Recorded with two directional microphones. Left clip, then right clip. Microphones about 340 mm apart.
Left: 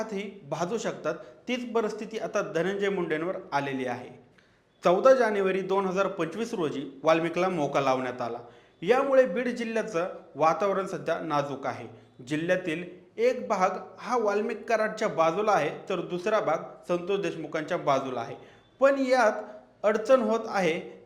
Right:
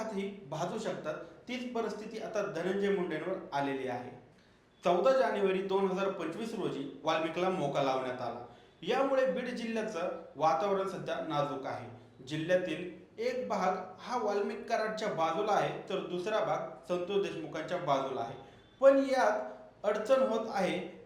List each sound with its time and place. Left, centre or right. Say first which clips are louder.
0.1 s a man's voice: left 5 dB; left